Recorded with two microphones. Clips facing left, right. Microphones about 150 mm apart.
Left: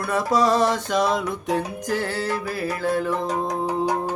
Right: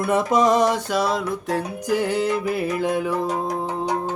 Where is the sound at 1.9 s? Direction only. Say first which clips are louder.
Right 5 dB; 15° right (ahead or behind).